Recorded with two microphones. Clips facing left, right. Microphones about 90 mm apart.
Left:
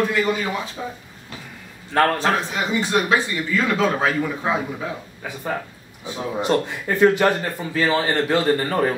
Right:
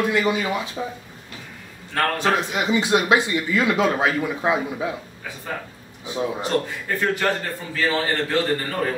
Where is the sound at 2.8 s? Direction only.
15° right (ahead or behind).